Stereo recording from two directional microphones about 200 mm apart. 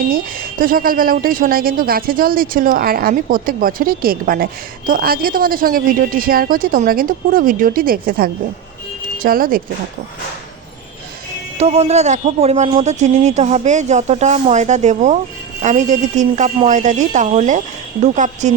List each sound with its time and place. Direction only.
0.6 s a woman's voice: 45° right (ahead or behind)
11.6 s speech: 30° right (ahead or behind)